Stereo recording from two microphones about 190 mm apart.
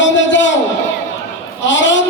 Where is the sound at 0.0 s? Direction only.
75° left (ahead or behind).